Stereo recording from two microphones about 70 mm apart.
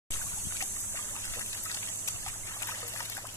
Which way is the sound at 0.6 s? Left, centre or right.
Left.